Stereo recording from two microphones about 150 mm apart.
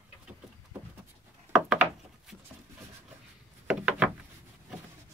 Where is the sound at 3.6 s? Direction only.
5° right (ahead or behind).